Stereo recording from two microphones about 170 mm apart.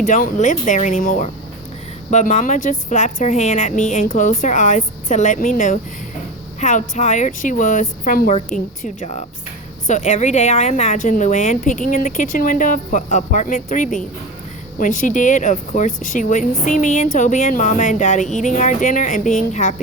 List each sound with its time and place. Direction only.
0.0 s speech: 50° left (ahead or behind)